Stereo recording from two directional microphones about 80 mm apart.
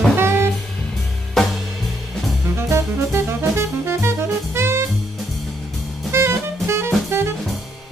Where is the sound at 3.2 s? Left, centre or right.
Right.